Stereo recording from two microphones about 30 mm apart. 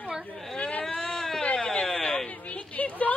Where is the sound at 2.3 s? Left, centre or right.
Left.